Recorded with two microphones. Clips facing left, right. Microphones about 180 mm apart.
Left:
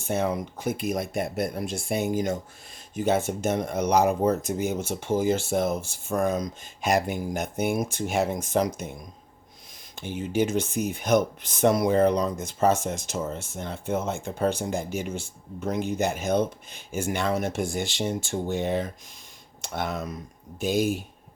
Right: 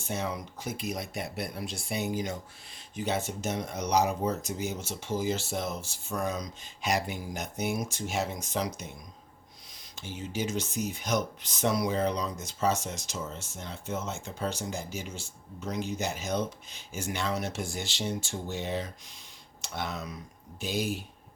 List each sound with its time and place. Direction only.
0.0 s speech: 55° left (ahead or behind)